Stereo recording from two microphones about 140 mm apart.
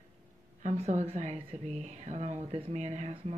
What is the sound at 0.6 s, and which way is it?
Speech, 55° right (ahead or behind).